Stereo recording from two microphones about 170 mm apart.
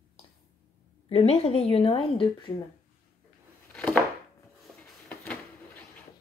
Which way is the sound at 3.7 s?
10° left (ahead or behind).